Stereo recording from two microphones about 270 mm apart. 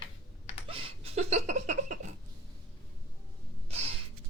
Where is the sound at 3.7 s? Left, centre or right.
Right.